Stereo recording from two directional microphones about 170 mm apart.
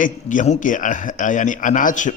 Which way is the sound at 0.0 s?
50° left (ahead or behind).